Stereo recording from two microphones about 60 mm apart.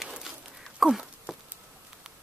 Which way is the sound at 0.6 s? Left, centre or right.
Centre.